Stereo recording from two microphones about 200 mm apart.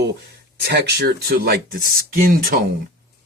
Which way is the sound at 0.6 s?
55° right (ahead or behind).